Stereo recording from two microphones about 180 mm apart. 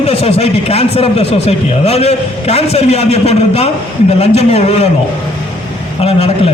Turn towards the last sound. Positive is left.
turn(degrees=35)  # may be behind; listen again after turning